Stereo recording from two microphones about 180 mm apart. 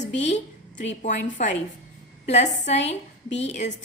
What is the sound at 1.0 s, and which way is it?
A woman's voice, 45° left (ahead or behind).